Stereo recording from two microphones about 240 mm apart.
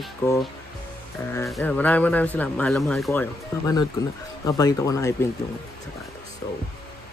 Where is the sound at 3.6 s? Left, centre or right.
Centre.